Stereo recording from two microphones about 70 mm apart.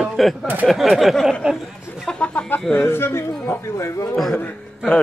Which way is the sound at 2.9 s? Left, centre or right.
Left.